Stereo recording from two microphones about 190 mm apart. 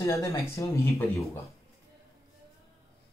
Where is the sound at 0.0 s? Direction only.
15° left (ahead or behind).